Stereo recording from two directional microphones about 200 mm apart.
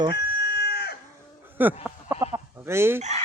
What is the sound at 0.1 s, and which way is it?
Chicken, 55° left (ahead or behind).